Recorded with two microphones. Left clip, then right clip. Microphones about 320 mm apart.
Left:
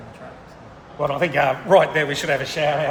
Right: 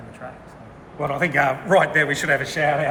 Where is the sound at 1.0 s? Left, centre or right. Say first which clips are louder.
Left 1 dB; centre.